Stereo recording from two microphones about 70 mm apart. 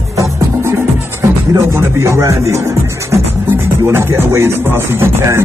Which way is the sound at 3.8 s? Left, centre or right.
Right.